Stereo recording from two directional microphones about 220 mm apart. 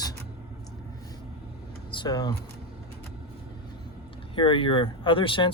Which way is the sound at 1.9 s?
20° left (ahead or behind).